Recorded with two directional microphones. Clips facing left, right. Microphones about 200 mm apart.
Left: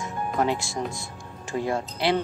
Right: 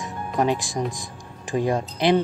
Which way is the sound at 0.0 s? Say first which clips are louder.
Right 2 dB; 15° right (ahead or behind).